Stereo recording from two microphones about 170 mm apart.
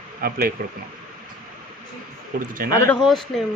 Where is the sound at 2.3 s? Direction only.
55° right (ahead or behind).